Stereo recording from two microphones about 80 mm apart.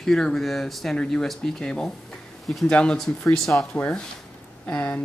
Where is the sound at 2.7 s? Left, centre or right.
Centre.